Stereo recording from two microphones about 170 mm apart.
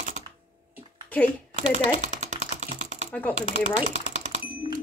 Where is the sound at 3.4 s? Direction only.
40° right (ahead or behind).